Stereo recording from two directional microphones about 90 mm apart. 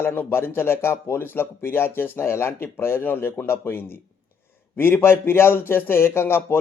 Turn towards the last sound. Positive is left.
turn(degrees=25)  # may be behind; listen again after turning